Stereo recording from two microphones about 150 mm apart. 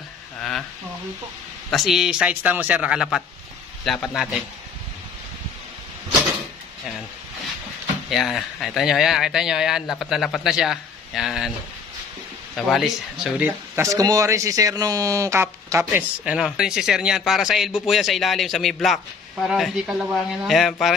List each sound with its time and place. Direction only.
0.4 s a sound: 5° left (ahead or behind)
1.7 s speech: centre (ahead or behind)
8.1 s speech: centre (ahead or behind)
12.5 s speech: centre (ahead or behind)
13.7 s speech: 20° right (ahead or behind); by 20.9 s centre (ahead or behind)